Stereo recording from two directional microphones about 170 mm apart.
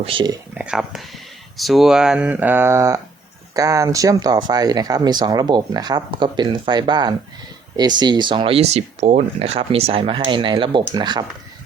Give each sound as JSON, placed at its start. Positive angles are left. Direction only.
{"t": 0.0, "sound": "speech", "side_deg": -30}
{"t": 0.6, "sound": "speech", "side_deg": -5}